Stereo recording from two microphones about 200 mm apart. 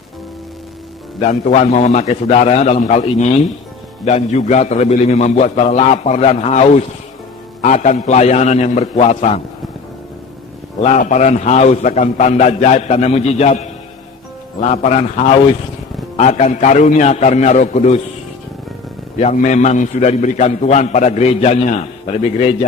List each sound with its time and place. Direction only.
1.2 s a man's voice: 40° left (ahead or behind)
10.8 s a man's voice: 35° left (ahead or behind)
14.6 s a man's voice: 35° left (ahead or behind)
19.2 s a man's voice: 35° left (ahead or behind)